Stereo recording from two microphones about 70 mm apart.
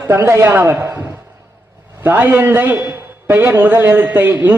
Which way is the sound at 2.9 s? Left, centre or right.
Right.